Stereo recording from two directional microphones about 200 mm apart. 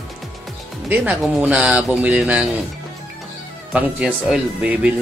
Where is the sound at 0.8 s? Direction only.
5° right (ahead or behind).